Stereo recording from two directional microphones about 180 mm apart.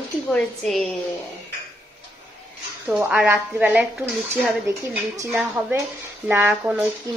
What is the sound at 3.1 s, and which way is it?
Speech, 5° right (ahead or behind).